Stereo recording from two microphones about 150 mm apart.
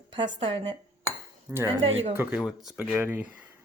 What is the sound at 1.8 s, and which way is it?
Speech, 40° right (ahead or behind).